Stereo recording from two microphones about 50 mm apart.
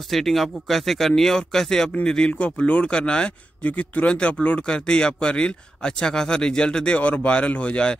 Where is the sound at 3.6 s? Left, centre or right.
Left.